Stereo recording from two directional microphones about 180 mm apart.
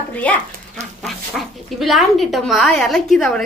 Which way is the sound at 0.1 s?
10° left (ahead or behind).